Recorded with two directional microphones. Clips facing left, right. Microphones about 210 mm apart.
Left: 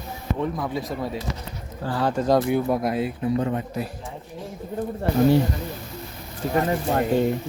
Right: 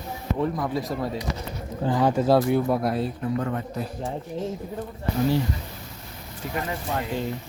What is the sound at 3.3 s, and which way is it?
Speech, 20° left (ahead or behind).